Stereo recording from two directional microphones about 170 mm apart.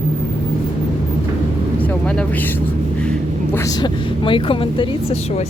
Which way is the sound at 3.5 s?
20° left (ahead or behind).